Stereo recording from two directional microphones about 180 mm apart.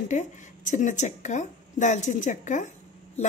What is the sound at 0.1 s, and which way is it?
A woman's voice, 45° left (ahead or behind).